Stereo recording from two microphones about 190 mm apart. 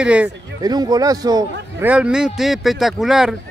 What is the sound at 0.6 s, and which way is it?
Speech, 20° right (ahead or behind).